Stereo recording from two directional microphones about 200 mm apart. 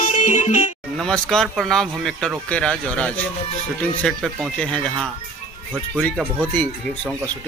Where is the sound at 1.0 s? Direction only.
Centre (ahead or behind).